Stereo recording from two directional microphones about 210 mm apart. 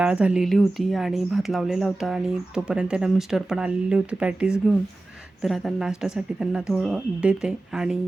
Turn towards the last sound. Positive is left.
turn(degrees=-5)  # may be behind; listen again after turning